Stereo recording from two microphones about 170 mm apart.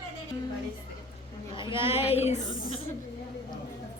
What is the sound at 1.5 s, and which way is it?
Speech, 30° left (ahead or behind).